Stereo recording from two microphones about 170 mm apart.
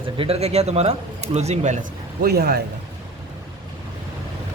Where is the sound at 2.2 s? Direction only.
65° right (ahead or behind).